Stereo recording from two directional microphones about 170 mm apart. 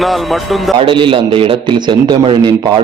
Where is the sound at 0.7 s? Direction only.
30° right (ahead or behind).